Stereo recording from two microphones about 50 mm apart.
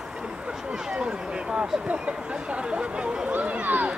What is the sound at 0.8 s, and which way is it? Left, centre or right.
Speech, centre.